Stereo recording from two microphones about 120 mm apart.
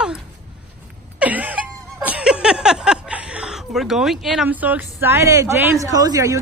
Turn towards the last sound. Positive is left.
turn(degrees=-30)  # may be behind; listen again after turning